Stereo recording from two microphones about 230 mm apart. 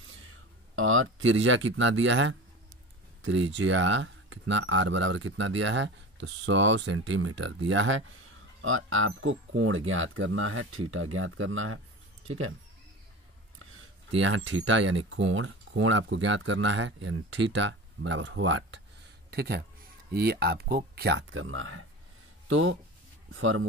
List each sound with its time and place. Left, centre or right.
0.7 s speech: right
14.1 s speech: right
19.3 s speech: right